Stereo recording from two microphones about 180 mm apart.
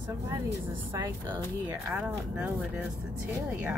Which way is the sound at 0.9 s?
25° right (ahead or behind).